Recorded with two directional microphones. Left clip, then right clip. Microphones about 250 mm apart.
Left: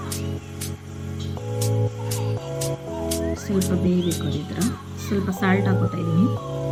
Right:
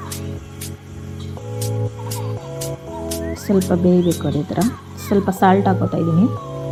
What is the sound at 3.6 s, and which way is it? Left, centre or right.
Speech, centre.